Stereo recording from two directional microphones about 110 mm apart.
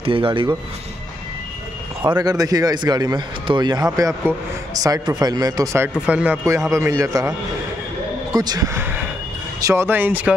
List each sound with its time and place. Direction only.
0.0 s speech: 55° right (ahead or behind)
2.0 s speech: 35° right (ahead or behind)
6.0 s speech: 10° right (ahead or behind)
6.7 s speech: 25° right (ahead or behind)